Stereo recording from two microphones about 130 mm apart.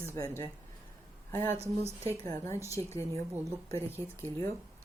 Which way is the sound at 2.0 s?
25° left (ahead or behind).